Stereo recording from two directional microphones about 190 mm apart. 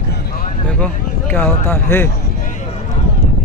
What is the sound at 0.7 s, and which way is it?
Speech, 5° left (ahead or behind).